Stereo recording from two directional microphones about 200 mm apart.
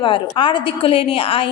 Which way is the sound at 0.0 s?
25° left (ahead or behind).